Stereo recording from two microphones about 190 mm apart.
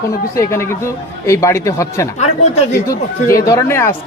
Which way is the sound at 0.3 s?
15° left (ahead or behind).